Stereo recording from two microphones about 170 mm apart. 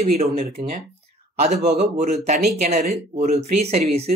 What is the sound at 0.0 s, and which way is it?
Speech, 35° right (ahead or behind).